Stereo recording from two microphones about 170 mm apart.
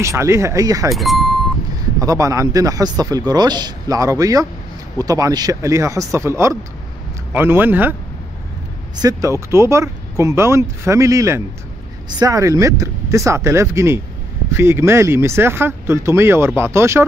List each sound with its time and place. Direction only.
0.0 s speech: 15° right (ahead or behind)
0.9 s speech: centre (ahead or behind)
2.0 s a man's voice: 20° right (ahead or behind)
9.0 s a man's voice: 15° right (ahead or behind)